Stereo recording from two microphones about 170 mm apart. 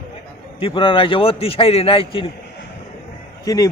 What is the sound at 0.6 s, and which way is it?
A man's voice, 30° left (ahead or behind).